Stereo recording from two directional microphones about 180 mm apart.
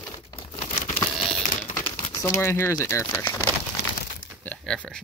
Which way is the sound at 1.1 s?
5° left (ahead or behind).